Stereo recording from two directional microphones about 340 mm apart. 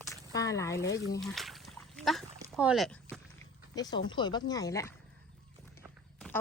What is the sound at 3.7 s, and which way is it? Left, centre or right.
Speech, centre.